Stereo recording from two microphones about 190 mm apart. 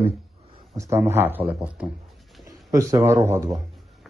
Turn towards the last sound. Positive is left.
turn(degrees=-15)  # may be behind; listen again after turning